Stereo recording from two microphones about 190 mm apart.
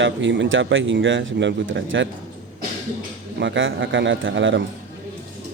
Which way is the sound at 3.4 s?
80° right.